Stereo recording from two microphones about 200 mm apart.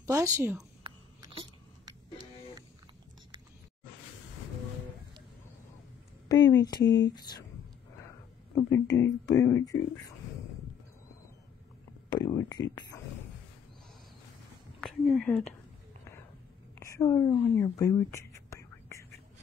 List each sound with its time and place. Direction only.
0.0 s a woman's voice: 15° right (ahead or behind)
0.8 s a sound: 25° right (ahead or behind)
6.2 s a woman's voice: 20° left (ahead or behind)
8.6 s speech: 15° left (ahead or behind)
12.2 s a woman's voice: 20° left (ahead or behind)
14.8 s speech: centre (ahead or behind)
16.8 s whispering: 15° left (ahead or behind)